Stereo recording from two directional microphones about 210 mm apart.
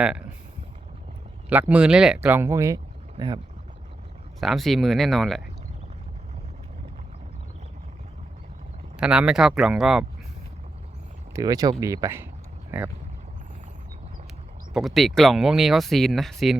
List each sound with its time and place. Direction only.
0.0 s speech: 5° right (ahead or behind)
1.5 s speech: 5° right (ahead or behind)
4.4 s speech: centre (ahead or behind)
9.0 s speech: 5° right (ahead or behind)
11.3 s speech: 15° right (ahead or behind)
14.7 s speech: centre (ahead or behind)